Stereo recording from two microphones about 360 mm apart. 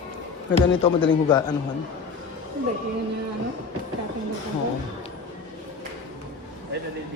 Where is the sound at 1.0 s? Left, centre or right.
Centre.